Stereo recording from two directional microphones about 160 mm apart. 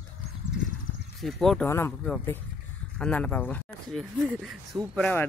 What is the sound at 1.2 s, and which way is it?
Speech, centre (ahead or behind).